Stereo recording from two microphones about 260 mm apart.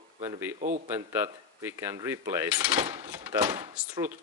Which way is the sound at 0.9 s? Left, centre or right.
Centre.